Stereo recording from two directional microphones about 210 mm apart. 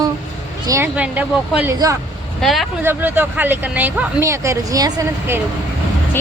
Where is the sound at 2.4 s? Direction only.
Centre (ahead or behind); by 5.4 s 15° right (ahead or behind).